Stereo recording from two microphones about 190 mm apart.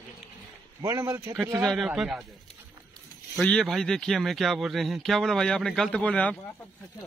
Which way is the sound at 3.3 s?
Centre (ahead or behind).